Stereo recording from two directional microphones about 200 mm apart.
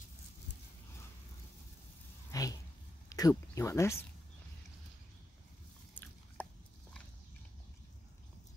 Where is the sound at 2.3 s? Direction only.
15° left (ahead or behind).